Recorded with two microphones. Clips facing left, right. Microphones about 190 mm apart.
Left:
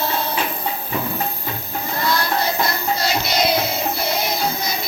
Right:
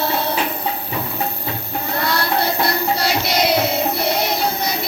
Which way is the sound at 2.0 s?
70° right (ahead or behind).